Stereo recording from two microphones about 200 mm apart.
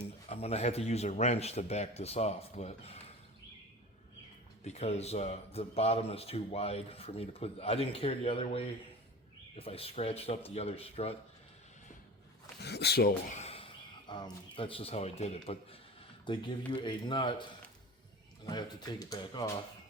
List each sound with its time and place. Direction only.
0.3 s speech: 30° left (ahead or behind)
4.6 s speech: 35° left (ahead or behind)
12.6 s speech: 55° left (ahead or behind)
13.3 s speech: 30° left (ahead or behind)
18.4 s speech: 20° left (ahead or behind)